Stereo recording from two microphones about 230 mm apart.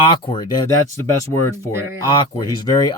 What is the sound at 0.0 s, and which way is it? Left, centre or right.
Speech, left.